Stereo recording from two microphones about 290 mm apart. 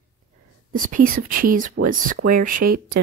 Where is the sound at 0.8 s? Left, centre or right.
Right.